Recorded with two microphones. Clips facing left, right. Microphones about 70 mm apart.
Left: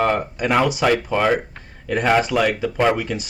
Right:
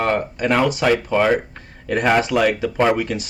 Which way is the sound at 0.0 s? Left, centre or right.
Centre.